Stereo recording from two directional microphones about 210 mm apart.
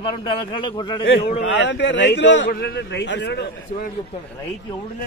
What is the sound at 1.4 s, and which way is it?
A man's voice, 60° left (ahead or behind).